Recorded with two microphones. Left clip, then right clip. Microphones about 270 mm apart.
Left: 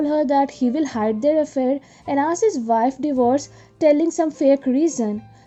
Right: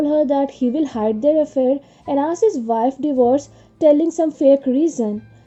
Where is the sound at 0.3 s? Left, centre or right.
Centre.